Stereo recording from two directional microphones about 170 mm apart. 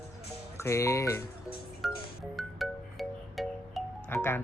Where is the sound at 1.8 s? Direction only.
Centre (ahead or behind).